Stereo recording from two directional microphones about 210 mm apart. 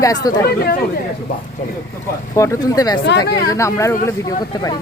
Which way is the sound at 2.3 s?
15° left (ahead or behind).